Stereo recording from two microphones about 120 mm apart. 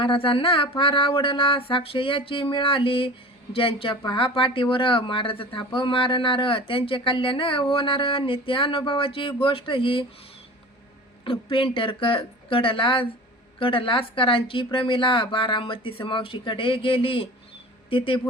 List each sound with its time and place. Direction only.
0.0 s speech: 45° left (ahead or behind)
11.3 s speech: 50° left (ahead or behind)